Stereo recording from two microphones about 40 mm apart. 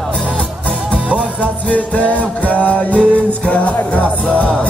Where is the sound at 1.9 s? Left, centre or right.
Left.